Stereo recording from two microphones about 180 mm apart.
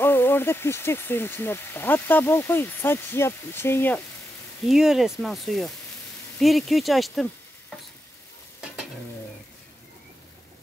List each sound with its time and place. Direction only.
0.0 s speech: 10° left (ahead or behind)
4.6 s speech: centre (ahead or behind)